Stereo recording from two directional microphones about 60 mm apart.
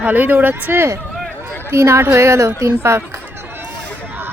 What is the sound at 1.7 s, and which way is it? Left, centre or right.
Speech, right.